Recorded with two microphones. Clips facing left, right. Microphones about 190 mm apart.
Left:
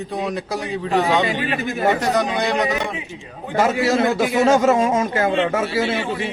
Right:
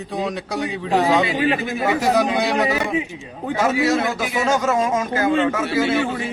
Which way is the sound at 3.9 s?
30° left (ahead or behind).